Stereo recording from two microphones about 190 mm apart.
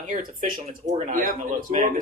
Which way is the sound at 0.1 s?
45° right (ahead or behind).